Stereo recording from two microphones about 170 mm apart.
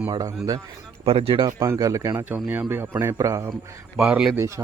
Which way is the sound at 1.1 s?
30° right (ahead or behind).